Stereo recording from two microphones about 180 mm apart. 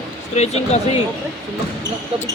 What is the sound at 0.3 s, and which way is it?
Speech, 35° left (ahead or behind).